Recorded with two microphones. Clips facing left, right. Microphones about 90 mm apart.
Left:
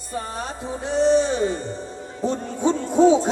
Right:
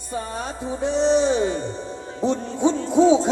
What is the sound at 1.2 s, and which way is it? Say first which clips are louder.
Music: right 1 dB; 45° left (ahead or behind).